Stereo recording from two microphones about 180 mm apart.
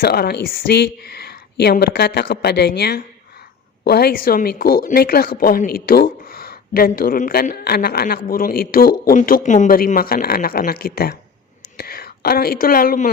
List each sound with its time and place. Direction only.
0.0 s speech: 60° left (ahead or behind)